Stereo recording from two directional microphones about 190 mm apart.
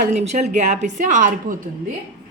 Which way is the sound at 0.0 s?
40° right (ahead or behind).